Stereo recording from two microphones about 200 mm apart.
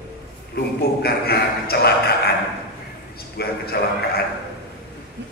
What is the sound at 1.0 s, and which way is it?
Speech, 50° left (ahead or behind).